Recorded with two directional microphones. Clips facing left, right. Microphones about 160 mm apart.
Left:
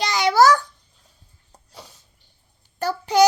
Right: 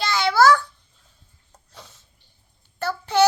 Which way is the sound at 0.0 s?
15° left (ahead or behind).